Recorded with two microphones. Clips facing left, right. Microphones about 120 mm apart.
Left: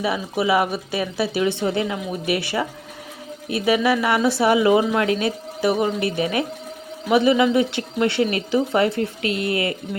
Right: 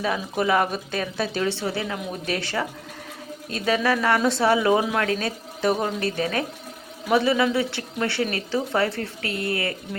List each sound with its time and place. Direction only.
0.0 s speech: 10° left (ahead or behind)
1.9 s speech: 10° left (ahead or behind)